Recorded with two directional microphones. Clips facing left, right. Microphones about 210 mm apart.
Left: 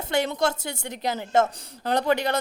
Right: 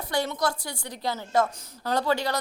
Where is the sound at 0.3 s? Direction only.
25° left (ahead or behind).